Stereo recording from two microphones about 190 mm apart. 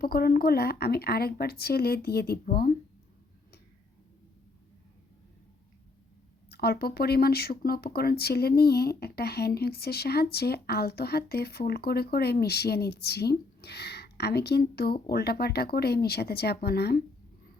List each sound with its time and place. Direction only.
0.0 s speech: 55° left (ahead or behind)
6.5 s speech: 55° left (ahead or behind)